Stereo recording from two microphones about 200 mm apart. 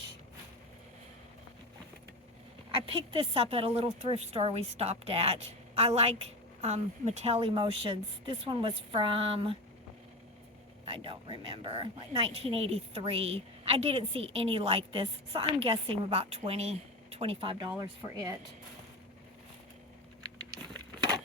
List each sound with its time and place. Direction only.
2.8 s speech: 25° right (ahead or behind)
10.8 s speech: 25° right (ahead or behind)